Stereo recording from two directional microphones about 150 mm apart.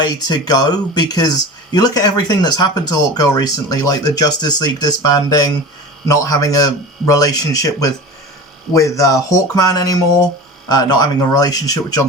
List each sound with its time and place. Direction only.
0.0 s speech: 25° left (ahead or behind)